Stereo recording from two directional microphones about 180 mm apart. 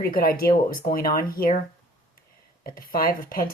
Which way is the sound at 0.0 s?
55° left (ahead or behind).